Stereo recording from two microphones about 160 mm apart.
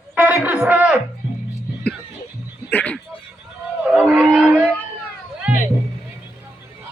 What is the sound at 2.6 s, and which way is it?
Music, 10° left (ahead or behind).